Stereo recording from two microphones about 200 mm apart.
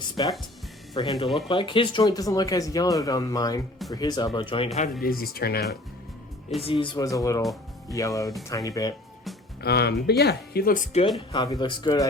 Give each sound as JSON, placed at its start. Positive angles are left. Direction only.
{"t": 0.2, "sound": "speech", "side_deg": 25}
{"t": 4.9, "sound": "speech", "side_deg": 50}
{"t": 6.6, "sound": "speech", "side_deg": 25}
{"t": 9.6, "sound": "speech", "side_deg": 55}
{"t": 11.3, "sound": "speech", "side_deg": 20}